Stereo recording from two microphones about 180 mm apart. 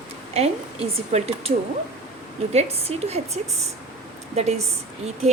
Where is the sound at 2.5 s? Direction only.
35° right (ahead or behind).